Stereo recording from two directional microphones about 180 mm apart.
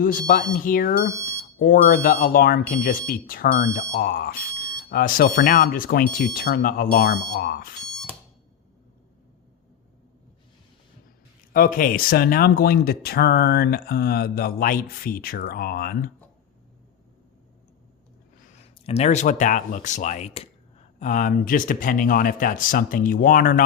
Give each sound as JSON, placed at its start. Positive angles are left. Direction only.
{"t": 0.0, "sound": "speech", "side_deg": 50}
{"t": 11.5, "sound": "speech", "side_deg": 50}
{"t": 18.5, "sound": "speech", "side_deg": 35}
{"t": 21.0, "sound": "speech", "side_deg": 45}